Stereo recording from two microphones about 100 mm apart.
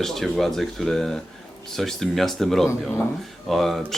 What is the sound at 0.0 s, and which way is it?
Speech, 5° left (ahead or behind).